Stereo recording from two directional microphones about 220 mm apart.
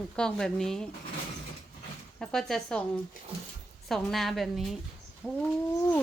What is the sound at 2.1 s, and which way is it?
Speech, centre (ahead or behind).